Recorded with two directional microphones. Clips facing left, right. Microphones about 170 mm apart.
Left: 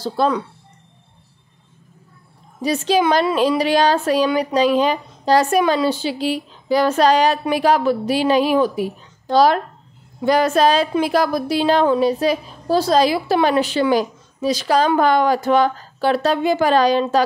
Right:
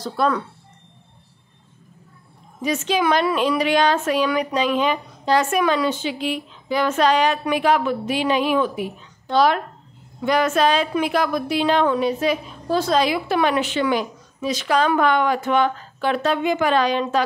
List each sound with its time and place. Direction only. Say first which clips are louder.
0.0 s speech: left 3 dB; 30° left (ahead or behind)
2.6 s a woman's voice: left 4 dB; 35° left (ahead or behind)